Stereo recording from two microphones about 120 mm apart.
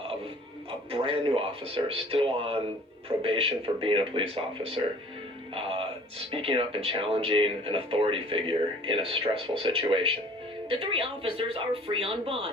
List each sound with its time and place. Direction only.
0.9 s speech: 50° right (ahead or behind)
5.5 s music: 50° right (ahead or behind)
6.3 s speech: 50° right (ahead or behind)